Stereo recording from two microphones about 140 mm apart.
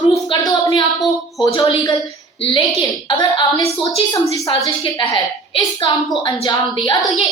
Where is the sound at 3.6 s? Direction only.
45° left (ahead or behind).